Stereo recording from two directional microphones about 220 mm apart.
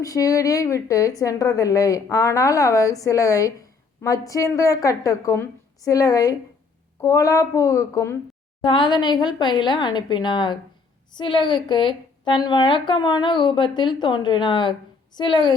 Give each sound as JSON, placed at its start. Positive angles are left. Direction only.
{"t": 0.0, "sound": "a woman's voice", "side_deg": 15}